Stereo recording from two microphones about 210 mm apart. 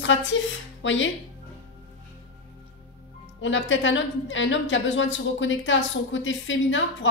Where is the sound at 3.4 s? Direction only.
65° left (ahead or behind).